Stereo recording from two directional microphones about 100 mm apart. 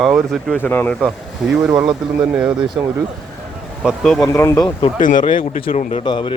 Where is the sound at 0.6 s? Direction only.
20° left (ahead or behind).